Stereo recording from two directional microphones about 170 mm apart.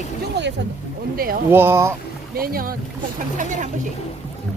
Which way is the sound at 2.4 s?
60° right (ahead or behind).